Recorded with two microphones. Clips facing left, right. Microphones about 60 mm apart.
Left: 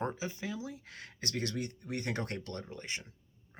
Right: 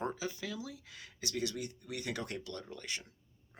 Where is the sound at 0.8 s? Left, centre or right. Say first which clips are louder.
Left 2 dB; left.